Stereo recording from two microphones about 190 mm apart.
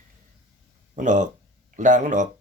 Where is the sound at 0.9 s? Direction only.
40° right (ahead or behind).